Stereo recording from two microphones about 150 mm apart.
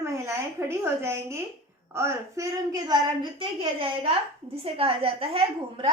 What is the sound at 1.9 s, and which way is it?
A woman's voice, 15° right (ahead or behind).